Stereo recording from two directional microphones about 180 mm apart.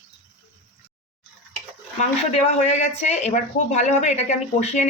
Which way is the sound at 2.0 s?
40° left (ahead or behind).